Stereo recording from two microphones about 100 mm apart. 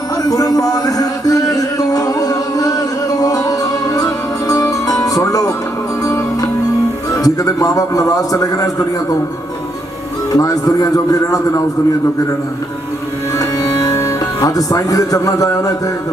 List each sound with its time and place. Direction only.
0.3 s music: 40° left (ahead or behind)
7.3 s a man's voice: 35° left (ahead or behind)
10.3 s a man's voice: 35° left (ahead or behind)
13.3 s music: 35° left (ahead or behind)